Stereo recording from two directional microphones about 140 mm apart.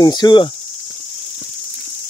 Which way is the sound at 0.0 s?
30° left (ahead or behind).